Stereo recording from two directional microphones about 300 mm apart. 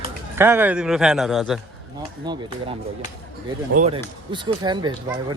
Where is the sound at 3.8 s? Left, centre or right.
Centre.